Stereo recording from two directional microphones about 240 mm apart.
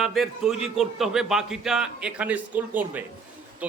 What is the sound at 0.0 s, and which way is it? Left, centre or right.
A man's voice, centre.